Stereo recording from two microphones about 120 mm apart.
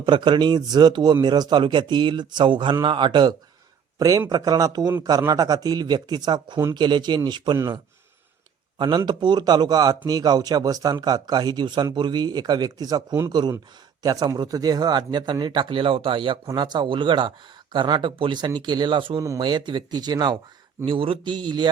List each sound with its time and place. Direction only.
0.0 s speech: 40° right (ahead or behind)
3.9 s speech: 30° right (ahead or behind)
8.8 s speech: 35° right (ahead or behind)
20.8 s speech: 50° right (ahead or behind)